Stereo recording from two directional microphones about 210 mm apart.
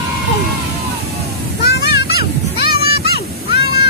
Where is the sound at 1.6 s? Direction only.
50° left (ahead or behind).